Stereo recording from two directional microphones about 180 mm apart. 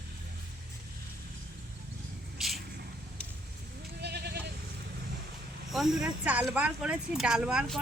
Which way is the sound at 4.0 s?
65° right (ahead or behind).